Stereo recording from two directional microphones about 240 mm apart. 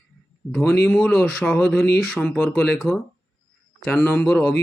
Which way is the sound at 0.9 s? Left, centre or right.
Centre.